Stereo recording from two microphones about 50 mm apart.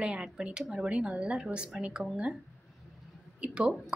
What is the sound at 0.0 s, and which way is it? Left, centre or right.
A woman's voice, centre.